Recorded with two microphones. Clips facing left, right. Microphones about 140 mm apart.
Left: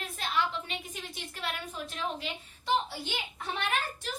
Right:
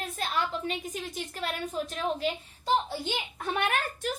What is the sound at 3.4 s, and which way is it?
Speech, 55° right (ahead or behind).